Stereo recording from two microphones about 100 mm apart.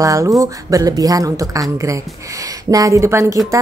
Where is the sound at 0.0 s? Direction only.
35° right (ahead or behind).